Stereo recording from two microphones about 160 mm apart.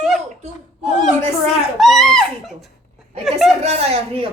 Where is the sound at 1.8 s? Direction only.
Centre (ahead or behind).